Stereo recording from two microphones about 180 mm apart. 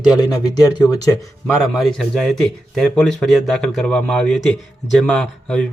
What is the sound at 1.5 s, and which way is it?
A man's voice, centre (ahead or behind).